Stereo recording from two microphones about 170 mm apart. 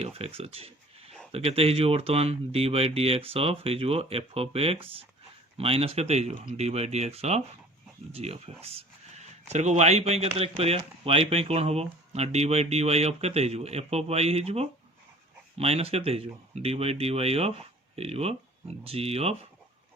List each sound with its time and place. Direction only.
0.0 s speech: 35° right (ahead or behind)